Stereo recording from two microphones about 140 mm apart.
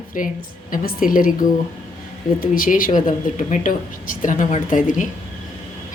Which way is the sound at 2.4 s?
85° left.